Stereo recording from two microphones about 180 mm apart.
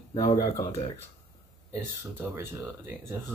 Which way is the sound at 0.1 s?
20° left (ahead or behind).